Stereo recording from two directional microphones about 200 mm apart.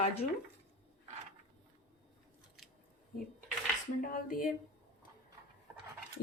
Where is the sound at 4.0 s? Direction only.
45° left (ahead or behind).